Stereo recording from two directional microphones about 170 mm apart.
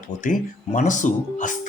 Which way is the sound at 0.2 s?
50° left (ahead or behind).